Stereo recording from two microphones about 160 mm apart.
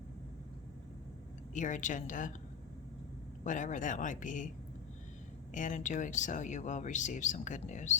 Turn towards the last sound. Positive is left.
turn(degrees=50)  # may be behind; listen again after turning